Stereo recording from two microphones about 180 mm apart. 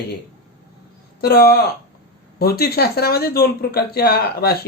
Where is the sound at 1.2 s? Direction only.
60° left (ahead or behind).